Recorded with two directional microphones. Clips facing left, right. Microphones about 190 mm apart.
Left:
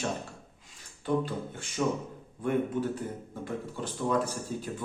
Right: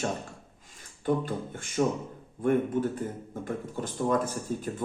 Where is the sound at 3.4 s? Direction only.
50° right (ahead or behind).